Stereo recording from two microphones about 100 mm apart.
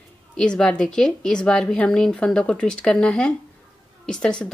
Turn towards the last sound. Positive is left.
turn(degrees=5)  # may be behind; listen again after turning